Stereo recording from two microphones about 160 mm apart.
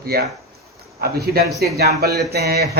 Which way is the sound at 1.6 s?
85° right.